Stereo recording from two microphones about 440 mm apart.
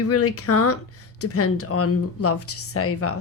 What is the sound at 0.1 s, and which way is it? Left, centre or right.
Speech, left.